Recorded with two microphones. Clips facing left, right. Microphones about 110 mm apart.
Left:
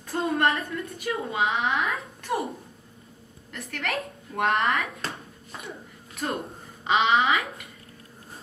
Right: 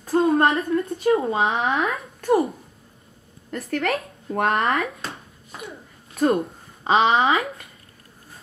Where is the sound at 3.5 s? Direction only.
40° right (ahead or behind).